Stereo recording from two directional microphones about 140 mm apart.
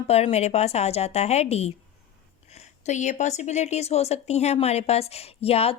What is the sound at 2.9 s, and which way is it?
Speech, 60° left (ahead or behind).